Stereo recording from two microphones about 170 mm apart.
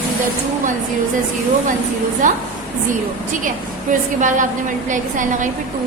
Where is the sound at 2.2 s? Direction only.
50° right (ahead or behind).